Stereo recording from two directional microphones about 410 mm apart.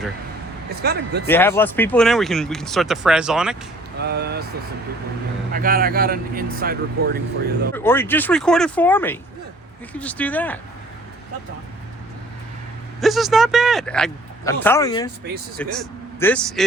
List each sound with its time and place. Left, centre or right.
0.7 s speech: right
1.3 s speech: centre
4.0 s speech: right
5.5 s speech: right
7.7 s speech: centre
13.0 s speech: centre